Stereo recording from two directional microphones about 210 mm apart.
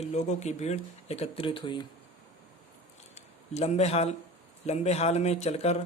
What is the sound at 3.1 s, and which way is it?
A man's voice, 30° left (ahead or behind).